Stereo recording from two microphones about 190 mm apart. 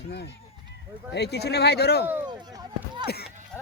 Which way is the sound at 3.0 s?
55° left (ahead or behind).